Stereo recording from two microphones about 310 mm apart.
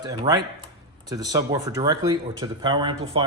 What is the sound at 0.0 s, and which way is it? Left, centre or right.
Speech, centre.